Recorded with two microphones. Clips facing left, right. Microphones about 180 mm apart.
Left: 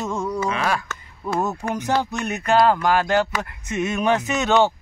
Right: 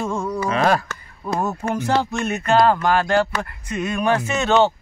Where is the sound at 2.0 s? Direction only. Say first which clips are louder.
Right 2 dB; 15° left (ahead or behind).